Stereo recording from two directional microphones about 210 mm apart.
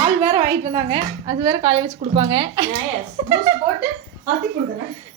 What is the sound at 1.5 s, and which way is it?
Speech, 25° right (ahead or behind).